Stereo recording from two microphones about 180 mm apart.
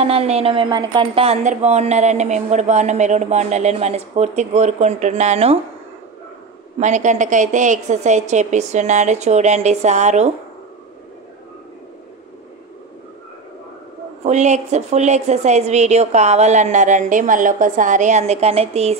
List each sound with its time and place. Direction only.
0.0 s speech: 35° right (ahead or behind)
6.8 s speech: 40° right (ahead or behind)
14.2 s speech: 40° right (ahead or behind)